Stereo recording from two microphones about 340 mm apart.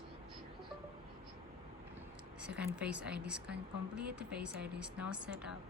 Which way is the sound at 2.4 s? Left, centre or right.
Centre.